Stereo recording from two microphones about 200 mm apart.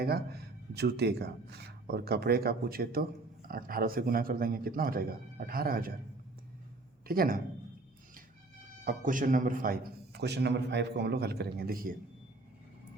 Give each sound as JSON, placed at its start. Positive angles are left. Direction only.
{"t": 0.8, "sound": "speech", "side_deg": -55}
{"t": 7.1, "sound": "speech", "side_deg": -45}
{"t": 8.8, "sound": "speech", "side_deg": -45}